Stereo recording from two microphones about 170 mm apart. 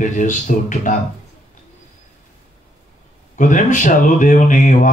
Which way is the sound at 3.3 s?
50° left (ahead or behind).